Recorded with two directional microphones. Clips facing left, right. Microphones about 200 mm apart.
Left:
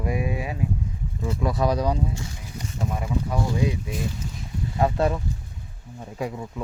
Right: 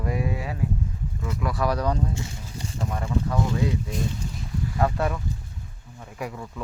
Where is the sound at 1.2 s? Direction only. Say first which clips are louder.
Left 3 dB; 30° left (ahead or behind).